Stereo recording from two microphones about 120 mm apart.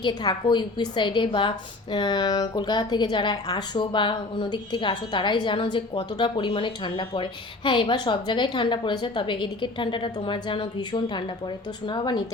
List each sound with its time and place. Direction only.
0.0 s a woman's voice: 40° left (ahead or behind)